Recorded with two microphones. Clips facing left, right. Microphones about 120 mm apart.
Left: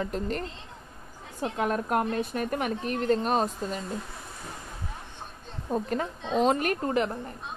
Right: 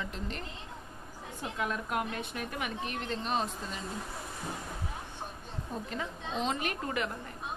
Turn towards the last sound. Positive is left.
turn(degrees=35)  # may be behind; listen again after turning